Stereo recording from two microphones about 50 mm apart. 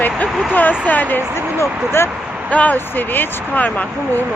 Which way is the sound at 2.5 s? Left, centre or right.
Left.